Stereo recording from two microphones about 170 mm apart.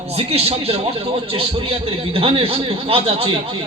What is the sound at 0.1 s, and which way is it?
A man's voice, 35° right (ahead or behind).